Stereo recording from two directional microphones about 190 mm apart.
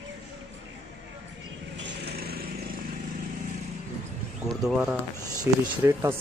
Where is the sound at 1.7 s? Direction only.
65° right (ahead or behind).